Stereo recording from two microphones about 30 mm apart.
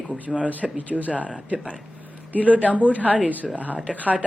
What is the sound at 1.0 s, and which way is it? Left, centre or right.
Speech, right.